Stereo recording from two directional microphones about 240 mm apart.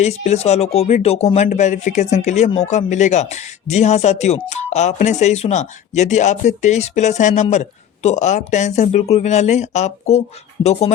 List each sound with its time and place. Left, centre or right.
0.0 s speech: left